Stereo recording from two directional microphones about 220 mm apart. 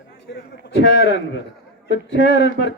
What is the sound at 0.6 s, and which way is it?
A man's voice, 50° left (ahead or behind).